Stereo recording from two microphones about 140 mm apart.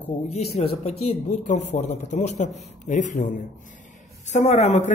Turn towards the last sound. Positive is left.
turn(degrees=55)  # may be behind; listen again after turning